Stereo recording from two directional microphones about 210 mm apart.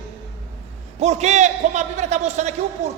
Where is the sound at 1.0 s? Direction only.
30° right (ahead or behind).